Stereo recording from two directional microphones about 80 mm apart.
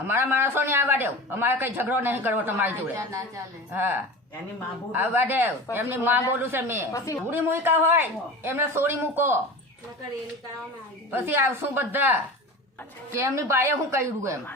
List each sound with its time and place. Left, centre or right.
0.1 s speech: right
2.9 s a woman's voice: right
3.8 s speech: right
6.9 s a woman's voice: left
7.3 s speech: right
11.1 s speech: right
13.1 s a woman's voice: right